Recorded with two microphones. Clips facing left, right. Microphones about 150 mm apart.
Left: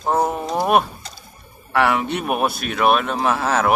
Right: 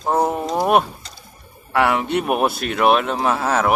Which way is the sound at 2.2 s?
20° right (ahead or behind).